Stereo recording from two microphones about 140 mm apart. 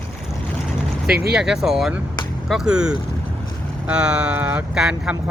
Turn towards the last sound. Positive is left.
turn(degrees=-5)  # may be behind; listen again after turning